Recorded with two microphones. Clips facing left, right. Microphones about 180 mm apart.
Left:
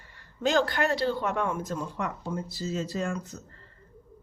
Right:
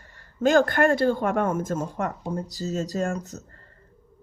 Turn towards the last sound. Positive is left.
turn(degrees=-45)  # may be behind; listen again after turning